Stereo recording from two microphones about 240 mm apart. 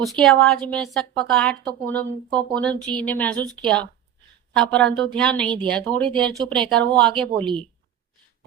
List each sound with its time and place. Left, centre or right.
0.0 s speech: centre
7.3 s a woman's voice: right